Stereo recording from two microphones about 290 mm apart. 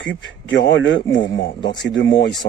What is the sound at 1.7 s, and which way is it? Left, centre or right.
Speech, left.